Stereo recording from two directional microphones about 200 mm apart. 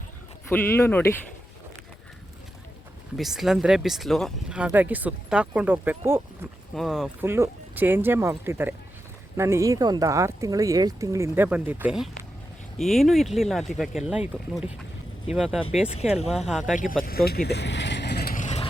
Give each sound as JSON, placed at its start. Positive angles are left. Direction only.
{"t": 0.4, "sound": "speech", "side_deg": 10}
{"t": 3.2, "sound": "speech", "side_deg": 0}
{"t": 15.3, "sound": "speech", "side_deg": 0}
{"t": 16.9, "sound": "vehicle", "side_deg": 45}
{"t": 18.3, "sound": "vehicle", "side_deg": 35}